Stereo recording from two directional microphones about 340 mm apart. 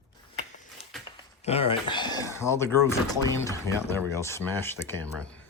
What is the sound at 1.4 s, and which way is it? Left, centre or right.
Speech, centre.